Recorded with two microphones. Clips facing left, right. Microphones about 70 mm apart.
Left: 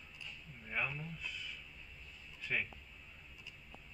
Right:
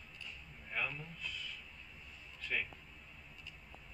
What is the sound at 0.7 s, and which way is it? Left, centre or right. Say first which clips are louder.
A man's voice: left 1 dB; centre.